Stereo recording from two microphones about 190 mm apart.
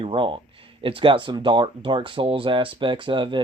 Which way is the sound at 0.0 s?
25° right (ahead or behind).